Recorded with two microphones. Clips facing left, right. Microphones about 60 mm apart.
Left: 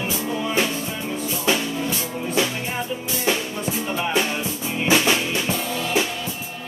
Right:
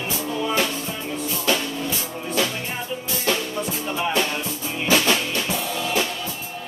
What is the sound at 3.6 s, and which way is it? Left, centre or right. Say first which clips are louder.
Music: left 1 dB; centre.